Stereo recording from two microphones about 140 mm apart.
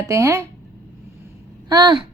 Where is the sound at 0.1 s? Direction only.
20° right (ahead or behind).